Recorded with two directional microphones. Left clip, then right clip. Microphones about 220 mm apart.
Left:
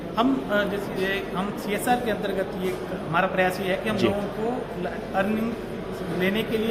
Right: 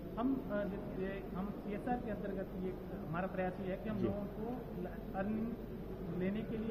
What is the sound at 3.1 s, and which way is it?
Speech, 15° left (ahead or behind).